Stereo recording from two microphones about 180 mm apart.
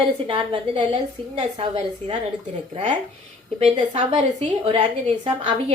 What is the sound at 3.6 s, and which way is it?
A woman's voice, 35° right (ahead or behind).